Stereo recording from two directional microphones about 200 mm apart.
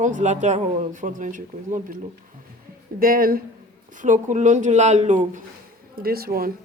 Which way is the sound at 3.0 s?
45° right (ahead or behind).